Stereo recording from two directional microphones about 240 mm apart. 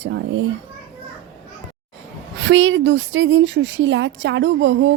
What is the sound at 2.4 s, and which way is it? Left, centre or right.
A woman's voice, right.